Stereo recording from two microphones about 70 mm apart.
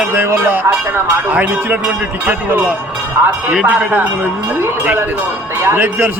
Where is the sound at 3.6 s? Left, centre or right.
Right.